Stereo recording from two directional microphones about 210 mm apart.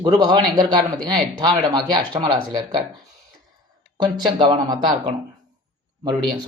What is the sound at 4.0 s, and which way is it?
Speech, 20° right (ahead or behind).